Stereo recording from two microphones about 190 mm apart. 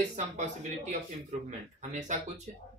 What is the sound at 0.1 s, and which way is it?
Speech, 40° right (ahead or behind).